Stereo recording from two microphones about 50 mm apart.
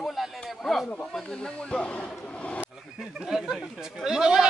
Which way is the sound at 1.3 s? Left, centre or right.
Left.